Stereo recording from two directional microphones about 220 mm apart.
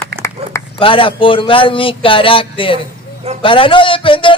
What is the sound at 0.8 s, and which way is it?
A man's voice, 25° left (ahead or behind).